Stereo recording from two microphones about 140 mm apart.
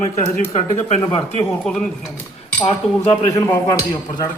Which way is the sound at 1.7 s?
5° left (ahead or behind).